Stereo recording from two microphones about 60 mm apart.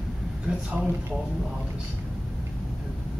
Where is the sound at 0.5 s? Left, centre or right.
Centre.